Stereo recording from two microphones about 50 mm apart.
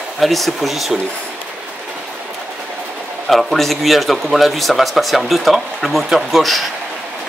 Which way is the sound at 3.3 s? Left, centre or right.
Centre.